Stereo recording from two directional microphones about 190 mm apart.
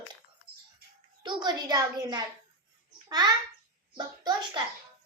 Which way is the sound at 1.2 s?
25° right (ahead or behind).